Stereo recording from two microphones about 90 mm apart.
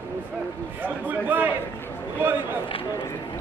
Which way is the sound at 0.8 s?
20° right (ahead or behind).